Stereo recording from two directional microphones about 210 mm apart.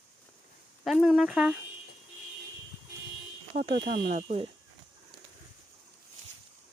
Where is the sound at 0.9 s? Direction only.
Centre (ahead or behind).